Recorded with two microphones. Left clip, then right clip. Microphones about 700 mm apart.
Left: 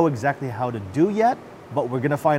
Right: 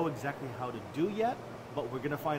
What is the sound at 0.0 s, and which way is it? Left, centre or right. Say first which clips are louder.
Speech: left 14 dB; left.